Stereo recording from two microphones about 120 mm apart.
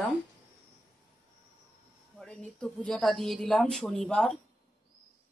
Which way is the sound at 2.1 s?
5° left (ahead or behind).